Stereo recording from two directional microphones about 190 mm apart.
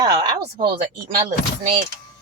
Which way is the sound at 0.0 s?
20° right (ahead or behind).